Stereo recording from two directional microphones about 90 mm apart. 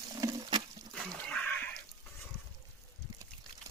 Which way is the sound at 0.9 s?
10° left (ahead or behind).